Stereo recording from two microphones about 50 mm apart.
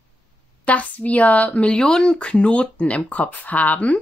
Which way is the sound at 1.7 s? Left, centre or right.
Centre.